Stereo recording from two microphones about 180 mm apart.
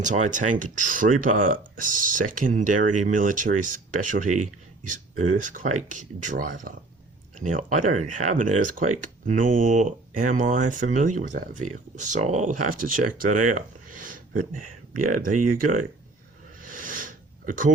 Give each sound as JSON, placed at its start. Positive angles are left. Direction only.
{"t": 0.0, "sound": "speech", "side_deg": -45}
{"t": 16.6, "sound": "sniff", "side_deg": -50}